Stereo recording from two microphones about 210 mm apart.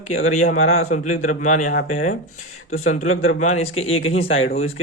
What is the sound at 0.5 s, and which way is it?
Speech, 80° left.